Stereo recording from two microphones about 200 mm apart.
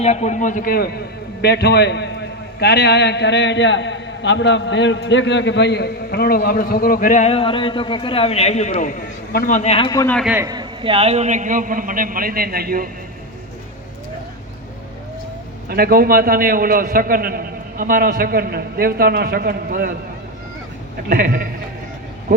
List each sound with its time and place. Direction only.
0.0 s a man's voice: 35° left (ahead or behind); by 10.2 s 15° left (ahead or behind)
10.2 s a man's voice: 5° right (ahead or behind)
10.4 s a man's voice: 20° right (ahead or behind); by 12.9 s 50° right (ahead or behind)
15.7 s a man's voice: 50° right (ahead or behind)
21.1 s a man's voice: 45° right (ahead or behind)